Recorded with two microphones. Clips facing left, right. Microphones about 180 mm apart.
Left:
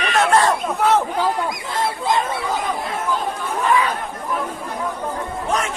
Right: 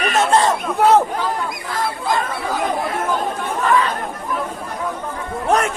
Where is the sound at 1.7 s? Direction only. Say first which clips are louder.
Even; 25° left (ahead or behind).